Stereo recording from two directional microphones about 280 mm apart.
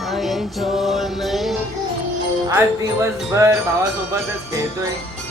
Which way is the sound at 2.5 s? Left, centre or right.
Centre.